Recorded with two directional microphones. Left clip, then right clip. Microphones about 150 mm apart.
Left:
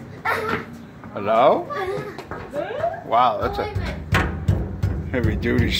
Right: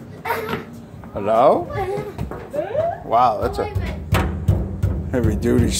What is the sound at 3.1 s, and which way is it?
Speech, 45° right (ahead or behind).